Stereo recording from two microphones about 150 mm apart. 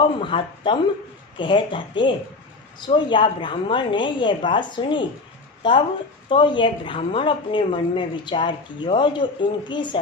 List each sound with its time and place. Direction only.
0.2 s a woman's voice: 35° left (ahead or behind)